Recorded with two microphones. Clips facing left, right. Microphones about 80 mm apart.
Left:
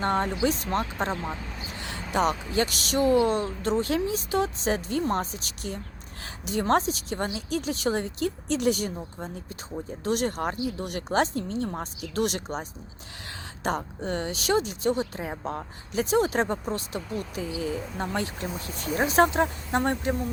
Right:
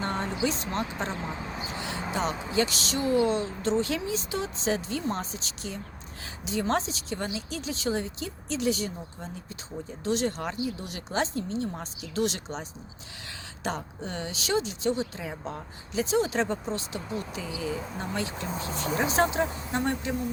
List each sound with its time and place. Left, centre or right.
0.0 s a woman's voice: left
1.4 s speech: right
1.9 s vehicle: right
2.3 s speech: right
2.9 s a woman's voice: left
13.7 s a woman's voice: left
18.3 s speech: right
19.1 s a woman's voice: left